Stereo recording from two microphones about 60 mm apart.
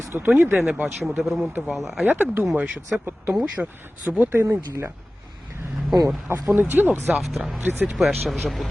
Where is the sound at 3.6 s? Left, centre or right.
Right.